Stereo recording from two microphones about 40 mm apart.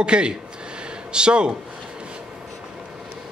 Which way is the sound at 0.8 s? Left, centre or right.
Right.